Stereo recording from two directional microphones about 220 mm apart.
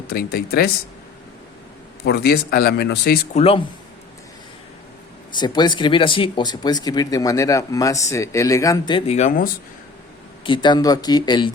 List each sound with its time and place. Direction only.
0.1 s speech: 45° left (ahead or behind)
2.0 s speech: 45° left (ahead or behind)
3.3 s speech: 25° left (ahead or behind)
5.3 s speech: 20° left (ahead or behind); by 9.5 s 35° left (ahead or behind)
10.4 s speech: 20° left (ahead or behind)